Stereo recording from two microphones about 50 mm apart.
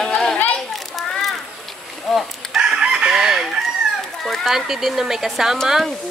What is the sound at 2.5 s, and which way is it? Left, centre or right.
Chicken, centre.